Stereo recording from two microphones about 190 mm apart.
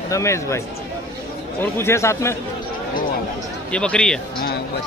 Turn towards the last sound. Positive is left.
turn(degrees=5)  # may be behind; listen again after turning